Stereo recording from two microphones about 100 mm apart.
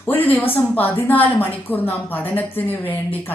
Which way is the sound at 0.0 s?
20° left (ahead or behind).